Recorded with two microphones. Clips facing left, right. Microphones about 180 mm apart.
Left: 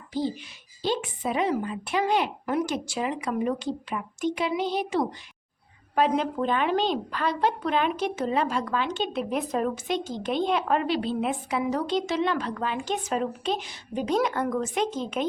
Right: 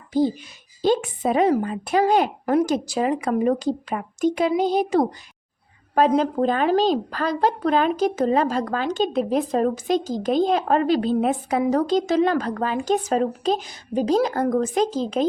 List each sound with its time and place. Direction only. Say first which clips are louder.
0.1 s a child's voice: right 8 dB; 45° right (ahead or behind)